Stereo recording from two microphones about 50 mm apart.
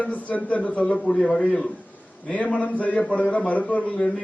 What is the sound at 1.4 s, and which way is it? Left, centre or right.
A man's voice, left.